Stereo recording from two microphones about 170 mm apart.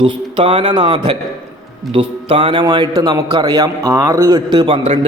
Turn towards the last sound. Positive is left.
turn(degrees=-25)  # may be behind; listen again after turning